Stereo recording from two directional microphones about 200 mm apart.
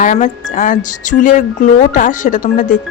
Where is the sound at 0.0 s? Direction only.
40° left (ahead or behind).